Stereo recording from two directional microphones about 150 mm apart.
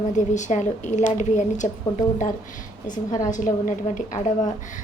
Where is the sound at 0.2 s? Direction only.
55° left (ahead or behind).